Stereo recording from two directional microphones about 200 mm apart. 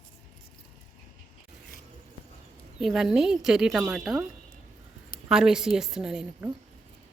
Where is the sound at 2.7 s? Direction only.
Centre (ahead or behind).